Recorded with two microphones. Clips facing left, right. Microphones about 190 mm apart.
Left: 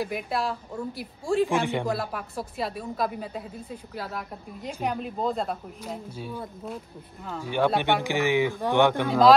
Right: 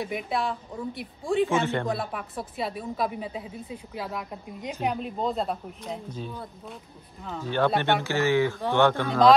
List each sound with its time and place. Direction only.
0.0 s a woman's voice: centre (ahead or behind)
1.6 s speech: 15° left (ahead or behind)
1.9 s a woman's voice: centre (ahead or behind); by 9.1 s 15° left (ahead or behind)